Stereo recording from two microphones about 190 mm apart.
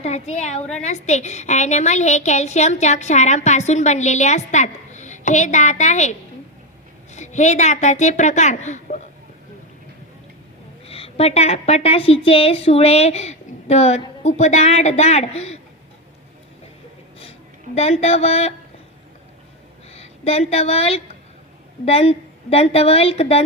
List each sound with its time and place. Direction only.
0.0 s a woman's voice: 35° left (ahead or behind)
10.8 s a woman's voice: 30° left (ahead or behind)
17.7 s a woman's voice: 35° left (ahead or behind)
19.9 s a woman's voice: 35° left (ahead or behind)